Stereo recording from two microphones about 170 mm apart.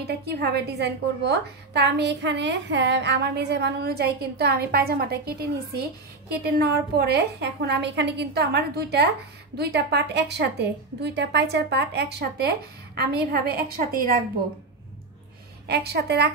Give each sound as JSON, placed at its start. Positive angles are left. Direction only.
{"t": 0.0, "sound": "a woman's voice", "side_deg": -70}
{"t": 15.6, "sound": "a woman's voice", "side_deg": -70}